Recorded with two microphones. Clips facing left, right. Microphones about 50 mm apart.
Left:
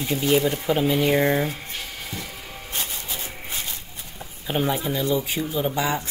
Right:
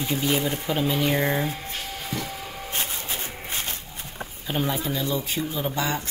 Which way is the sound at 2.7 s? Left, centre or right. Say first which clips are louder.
Even; right.